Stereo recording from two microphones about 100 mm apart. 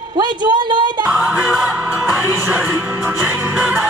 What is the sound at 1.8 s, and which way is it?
Music, 15° right (ahead or behind).